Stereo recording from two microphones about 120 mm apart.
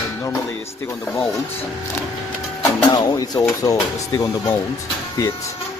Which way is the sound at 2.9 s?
30° left (ahead or behind).